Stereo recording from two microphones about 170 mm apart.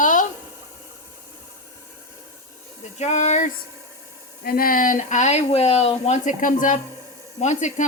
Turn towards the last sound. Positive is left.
turn(degrees=45)  # may be behind; listen again after turning